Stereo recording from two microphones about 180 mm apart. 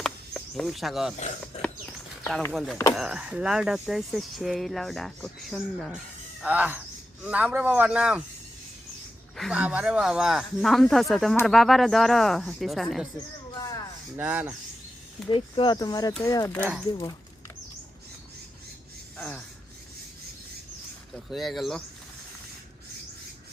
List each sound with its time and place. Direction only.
0.0 s a sound: centre (ahead or behind)
2.5 s a man's voice: centre (ahead or behind)
9.3 s speech: centre (ahead or behind)
13.6 s a sound: 20° left (ahead or behind)
14.2 s speech: 10° right (ahead or behind)
15.3 s speech: 30° left (ahead or behind)
19.1 s gasp: 5° left (ahead or behind)
21.1 s speech: centre (ahead or behind)